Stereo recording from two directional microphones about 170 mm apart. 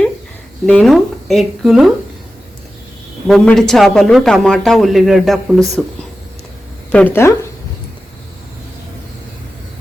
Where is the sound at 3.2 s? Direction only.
5° left (ahead or behind).